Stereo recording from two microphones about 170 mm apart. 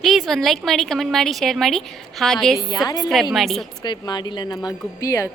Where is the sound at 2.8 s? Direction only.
25° left (ahead or behind).